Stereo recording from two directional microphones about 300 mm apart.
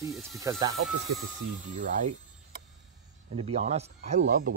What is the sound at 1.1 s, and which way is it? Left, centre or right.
Speech, right.